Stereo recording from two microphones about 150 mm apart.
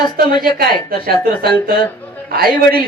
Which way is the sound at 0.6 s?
85° right.